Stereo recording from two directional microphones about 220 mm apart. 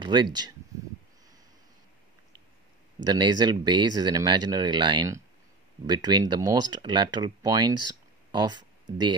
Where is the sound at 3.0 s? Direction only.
20° right (ahead or behind).